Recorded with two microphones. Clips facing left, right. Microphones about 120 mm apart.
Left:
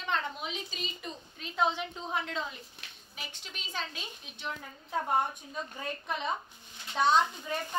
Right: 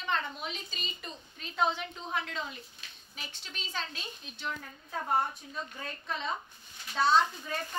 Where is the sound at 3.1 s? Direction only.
10° left (ahead or behind).